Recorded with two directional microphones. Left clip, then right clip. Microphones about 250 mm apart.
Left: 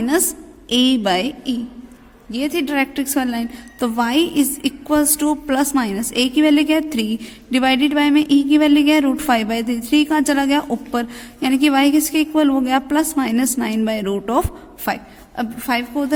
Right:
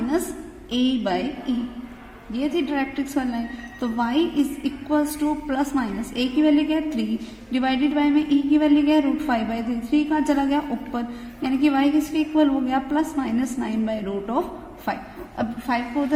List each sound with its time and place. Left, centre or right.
0.7 s a woman's voice: left
2.3 s a woman's voice: left